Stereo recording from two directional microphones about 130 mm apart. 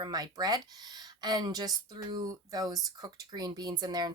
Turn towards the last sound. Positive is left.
turn(degrees=-30)  # may be behind; listen again after turning